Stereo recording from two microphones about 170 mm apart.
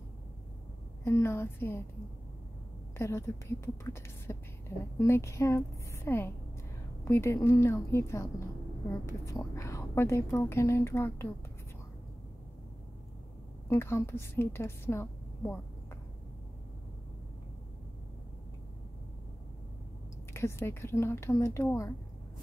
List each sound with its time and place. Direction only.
1.0 s speech: 15° left (ahead or behind)
3.0 s speech: 15° left (ahead or behind)
13.7 s speech: 15° left (ahead or behind)
20.3 s speech: 15° left (ahead or behind)